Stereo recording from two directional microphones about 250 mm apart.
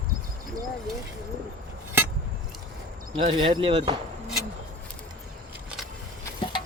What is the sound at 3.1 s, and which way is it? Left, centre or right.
Speech, right.